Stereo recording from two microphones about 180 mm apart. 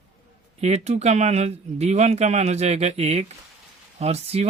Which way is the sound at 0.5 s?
35° right (ahead or behind).